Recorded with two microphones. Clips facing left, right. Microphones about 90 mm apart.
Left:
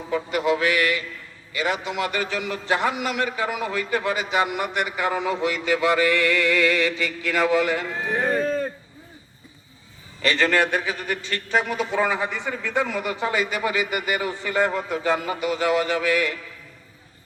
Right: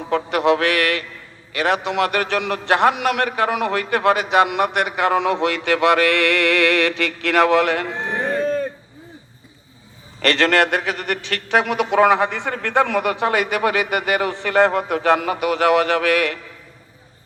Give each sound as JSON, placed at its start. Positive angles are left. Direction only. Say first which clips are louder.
{"t": 0.1, "sound": "a man's voice", "louder": "right 5 dB", "side_deg": -75}
{"t": 10.2, "sound": "a man's voice", "louder": "right 4 dB", "side_deg": -80}